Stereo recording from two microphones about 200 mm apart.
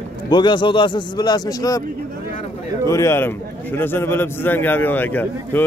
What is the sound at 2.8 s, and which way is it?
A man's voice, 15° left (ahead or behind).